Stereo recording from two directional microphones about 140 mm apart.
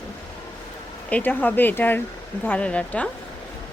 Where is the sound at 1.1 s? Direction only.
15° left (ahead or behind).